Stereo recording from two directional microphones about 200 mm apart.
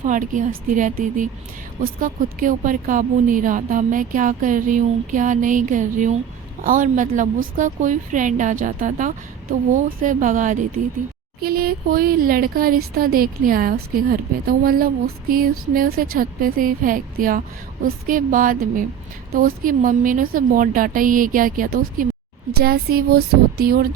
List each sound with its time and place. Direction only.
0.0 s a woman's voice: 40° right (ahead or behind)